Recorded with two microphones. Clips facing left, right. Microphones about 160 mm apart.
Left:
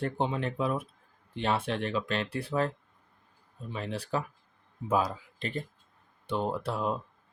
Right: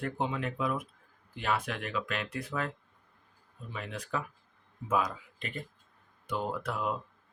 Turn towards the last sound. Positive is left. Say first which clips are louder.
# left 3 dB
turn(degrees=30)  # may be behind; listen again after turning